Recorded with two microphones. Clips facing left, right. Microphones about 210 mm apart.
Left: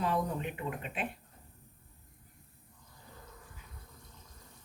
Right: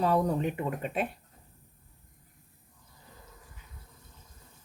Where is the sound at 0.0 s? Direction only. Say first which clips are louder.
Right 6 dB; 40° right (ahead or behind).